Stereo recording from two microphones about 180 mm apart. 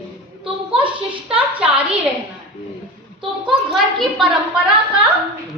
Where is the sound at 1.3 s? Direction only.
5° right (ahead or behind).